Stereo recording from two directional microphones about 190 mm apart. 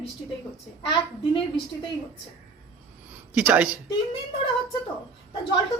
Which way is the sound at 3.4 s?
10° right (ahead or behind).